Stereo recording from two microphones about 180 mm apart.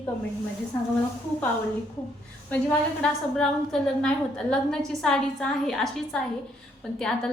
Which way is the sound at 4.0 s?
5° left (ahead or behind).